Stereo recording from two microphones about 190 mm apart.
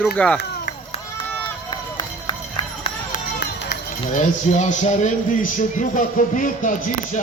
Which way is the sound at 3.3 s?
65° left (ahead or behind).